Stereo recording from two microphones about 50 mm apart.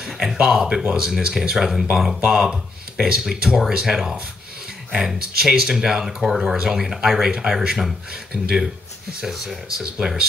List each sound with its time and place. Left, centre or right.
0.0 s speech: centre
9.9 s speech: centre